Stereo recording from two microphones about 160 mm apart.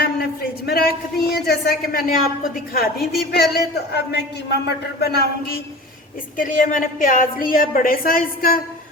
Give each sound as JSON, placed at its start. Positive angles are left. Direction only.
{"t": 0.0, "sound": "a sound", "side_deg": 75}
{"t": 1.3, "sound": "a woman's voice", "side_deg": 80}
{"t": 4.9, "sound": "a woman's voice", "side_deg": 75}
{"t": 6.3, "sound": "a woman's voice", "side_deg": 60}